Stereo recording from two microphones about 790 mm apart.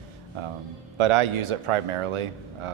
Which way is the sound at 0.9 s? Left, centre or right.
Right.